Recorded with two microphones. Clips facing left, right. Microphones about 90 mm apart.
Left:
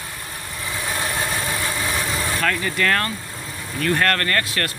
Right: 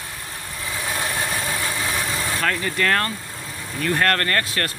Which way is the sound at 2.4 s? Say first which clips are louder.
Even; 30° right (ahead or behind).